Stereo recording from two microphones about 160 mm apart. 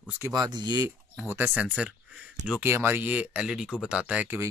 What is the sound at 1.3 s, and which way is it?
Speech, 10° right (ahead or behind).